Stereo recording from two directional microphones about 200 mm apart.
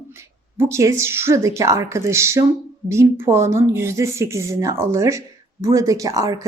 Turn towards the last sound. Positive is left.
turn(degrees=-15)  # may be behind; listen again after turning